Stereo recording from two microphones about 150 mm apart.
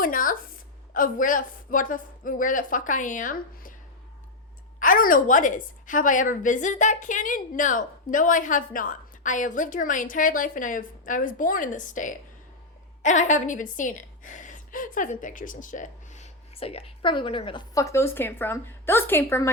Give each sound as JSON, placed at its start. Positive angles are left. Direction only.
{"t": 0.0, "sound": "a woman's voice", "side_deg": 65}
{"t": 4.8, "sound": "a woman's voice", "side_deg": 65}